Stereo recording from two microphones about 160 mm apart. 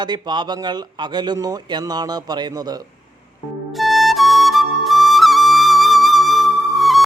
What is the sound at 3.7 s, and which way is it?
Flute, centre (ahead or behind).